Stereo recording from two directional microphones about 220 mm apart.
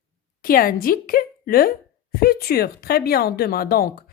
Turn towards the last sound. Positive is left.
turn(degrees=45)  # may be behind; listen again after turning